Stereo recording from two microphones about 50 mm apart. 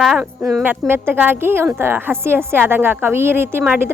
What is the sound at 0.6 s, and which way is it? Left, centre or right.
A woman's voice, right.